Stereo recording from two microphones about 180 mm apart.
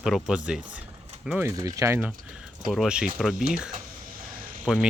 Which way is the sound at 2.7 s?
5° right (ahead or behind).